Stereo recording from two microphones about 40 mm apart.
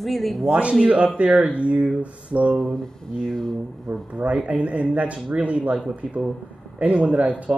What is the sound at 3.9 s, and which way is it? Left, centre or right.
Speech, right.